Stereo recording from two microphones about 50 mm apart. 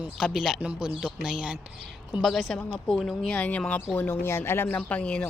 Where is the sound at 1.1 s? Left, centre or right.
Centre.